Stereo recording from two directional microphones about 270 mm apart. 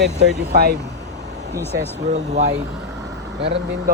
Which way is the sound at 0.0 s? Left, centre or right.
Right.